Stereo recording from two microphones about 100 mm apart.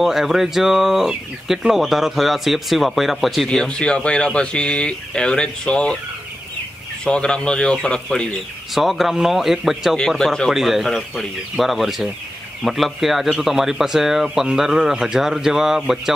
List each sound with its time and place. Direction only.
0.0 s speech: 5° right (ahead or behind)
7.1 s speech: 10° left (ahead or behind)